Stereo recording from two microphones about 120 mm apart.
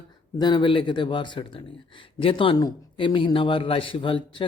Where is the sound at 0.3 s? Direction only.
40° left (ahead or behind).